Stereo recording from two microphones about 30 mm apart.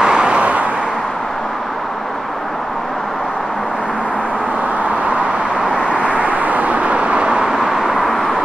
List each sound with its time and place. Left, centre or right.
0.0 s vehicle: right
5.9 s vehicle: right
7.5 s vehicle: centre